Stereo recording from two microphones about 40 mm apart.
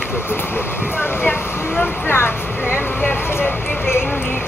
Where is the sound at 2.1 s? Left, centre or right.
Left.